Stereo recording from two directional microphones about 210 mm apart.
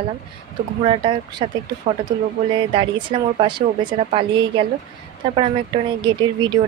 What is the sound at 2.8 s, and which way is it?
Speech, 20° right (ahead or behind).